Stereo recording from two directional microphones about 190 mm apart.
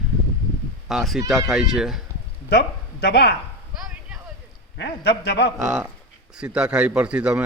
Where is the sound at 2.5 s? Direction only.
60° left (ahead or behind).